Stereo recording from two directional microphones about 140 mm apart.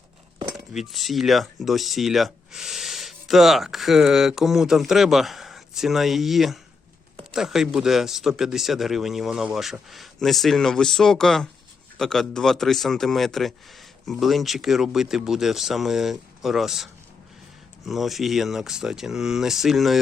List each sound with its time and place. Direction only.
0.7 s speech: centre (ahead or behind)